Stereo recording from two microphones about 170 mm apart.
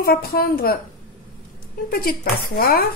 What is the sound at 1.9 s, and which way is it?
Speech, 60° left (ahead or behind).